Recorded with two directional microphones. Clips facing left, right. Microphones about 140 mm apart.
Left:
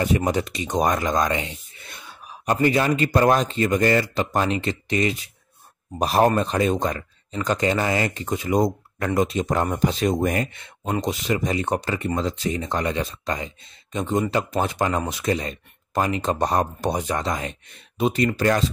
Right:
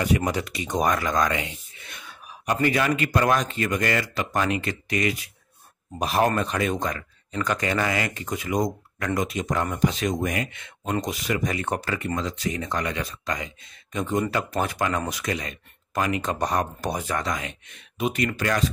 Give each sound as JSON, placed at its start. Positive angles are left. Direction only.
{"t": 0.0, "sound": "speech", "side_deg": 25}